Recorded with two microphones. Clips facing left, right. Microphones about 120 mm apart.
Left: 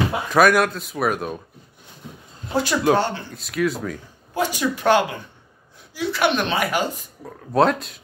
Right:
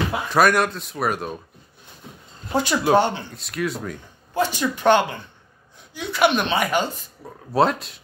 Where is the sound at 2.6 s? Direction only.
Centre (ahead or behind).